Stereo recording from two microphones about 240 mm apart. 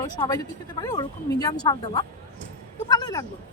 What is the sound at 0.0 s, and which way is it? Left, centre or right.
Speech, centre.